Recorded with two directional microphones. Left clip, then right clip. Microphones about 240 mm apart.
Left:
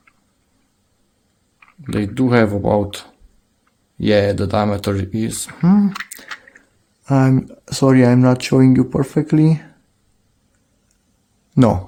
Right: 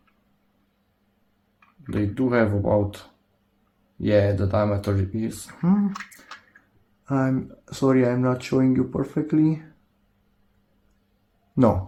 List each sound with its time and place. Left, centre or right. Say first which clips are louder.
1.9 s speech: left 6 dB; left
7.0 s speech: left 8 dB; left
11.5 s speech: left 5 dB; left